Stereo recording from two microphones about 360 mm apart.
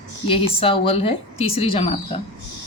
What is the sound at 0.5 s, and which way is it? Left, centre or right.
Speech, centre.